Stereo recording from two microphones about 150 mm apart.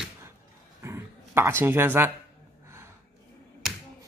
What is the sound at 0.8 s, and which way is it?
Dog, 15° right (ahead or behind).